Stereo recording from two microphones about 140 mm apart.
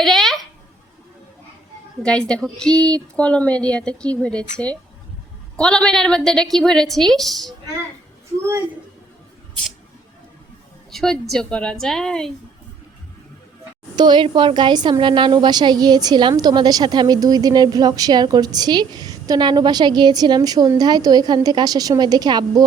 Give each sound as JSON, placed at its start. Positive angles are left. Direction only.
{"t": 0.0, "sound": "a sound", "side_deg": 0}
{"t": 2.0, "sound": "a woman's voice", "side_deg": 5}
{"t": 10.9, "sound": "a woman's voice", "side_deg": 5}
{"t": 13.9, "sound": "a woman's voice", "side_deg": -30}